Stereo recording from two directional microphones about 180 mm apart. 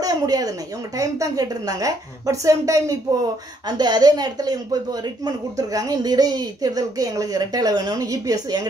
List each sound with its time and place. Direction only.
0.0 s speech: 20° right (ahead or behind)